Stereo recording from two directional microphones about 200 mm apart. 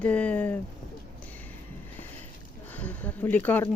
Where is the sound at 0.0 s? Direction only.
5° left (ahead or behind).